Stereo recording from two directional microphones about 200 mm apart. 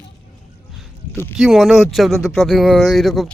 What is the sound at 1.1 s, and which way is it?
Speech, 10° left (ahead or behind).